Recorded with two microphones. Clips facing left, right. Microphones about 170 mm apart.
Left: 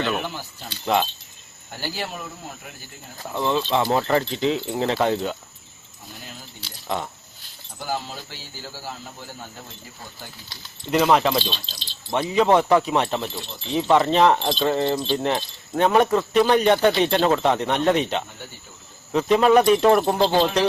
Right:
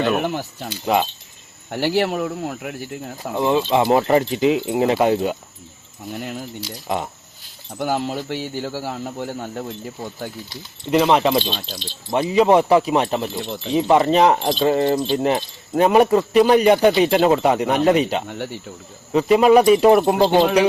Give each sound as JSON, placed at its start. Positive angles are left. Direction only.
{"t": 0.2, "sound": "speech", "side_deg": -60}
{"t": 0.9, "sound": "speech", "side_deg": -5}
{"t": 1.7, "sound": "speech", "side_deg": -70}
{"t": 3.3, "sound": "speech", "side_deg": -15}
{"t": 6.1, "sound": "speech", "side_deg": -65}
{"t": 6.6, "sound": "speech", "side_deg": -15}
{"t": 7.8, "sound": "speech", "side_deg": -65}
{"t": 10.9, "sound": "speech", "side_deg": -5}
{"t": 11.5, "sound": "speech", "side_deg": -55}
{"t": 12.1, "sound": "speech", "side_deg": -5}
{"t": 18.3, "sound": "speech", "side_deg": -75}
{"t": 19.1, "sound": "speech", "side_deg": -10}